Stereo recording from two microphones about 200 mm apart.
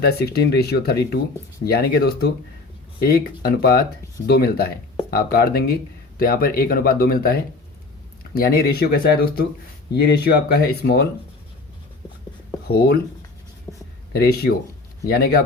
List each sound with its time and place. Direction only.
0.0 s speech: 55° left (ahead or behind)
12.6 s speech: 50° left (ahead or behind)
14.1 s speech: 50° left (ahead or behind)